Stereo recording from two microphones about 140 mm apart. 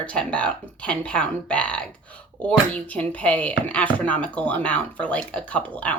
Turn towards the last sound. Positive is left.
turn(degrees=10)  # may be behind; listen again after turning